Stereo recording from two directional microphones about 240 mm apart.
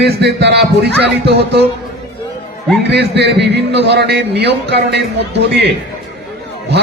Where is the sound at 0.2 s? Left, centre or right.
Right.